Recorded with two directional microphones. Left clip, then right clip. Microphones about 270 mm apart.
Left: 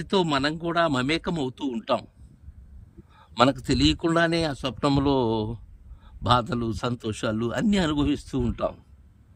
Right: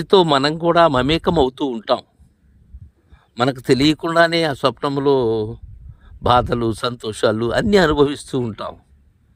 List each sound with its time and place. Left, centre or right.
0.1 s speech: centre
3.3 s speech: centre
3.6 s speech: centre